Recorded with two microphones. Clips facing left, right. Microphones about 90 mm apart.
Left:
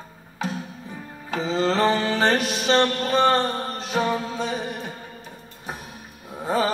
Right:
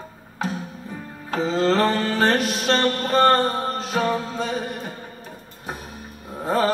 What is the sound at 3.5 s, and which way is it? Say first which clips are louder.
Music: right 3 dB; 40° right (ahead or behind).